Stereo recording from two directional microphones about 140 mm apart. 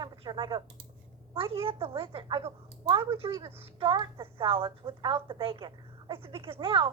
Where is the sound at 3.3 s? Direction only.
25° right (ahead or behind).